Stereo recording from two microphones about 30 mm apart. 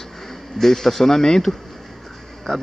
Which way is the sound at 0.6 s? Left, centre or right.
Centre.